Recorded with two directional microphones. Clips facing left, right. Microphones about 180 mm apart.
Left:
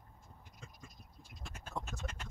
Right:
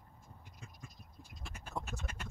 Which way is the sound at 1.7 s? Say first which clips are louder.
Even; 10° right (ahead or behind).